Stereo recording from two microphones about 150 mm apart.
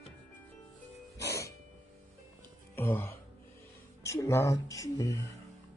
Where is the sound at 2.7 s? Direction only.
15° left (ahead or behind).